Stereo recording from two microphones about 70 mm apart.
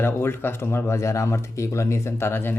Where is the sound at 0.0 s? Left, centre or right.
Left.